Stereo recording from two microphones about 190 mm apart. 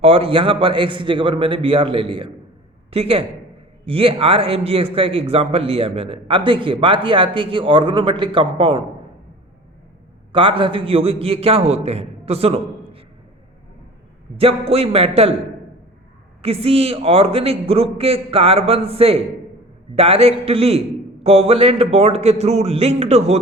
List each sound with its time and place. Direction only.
0.0 s a man's voice: 30° right (ahead or behind)
10.3 s a man's voice: 25° right (ahead or behind)
14.3 s a man's voice: 30° right (ahead or behind)
16.4 s a man's voice: 30° right (ahead or behind)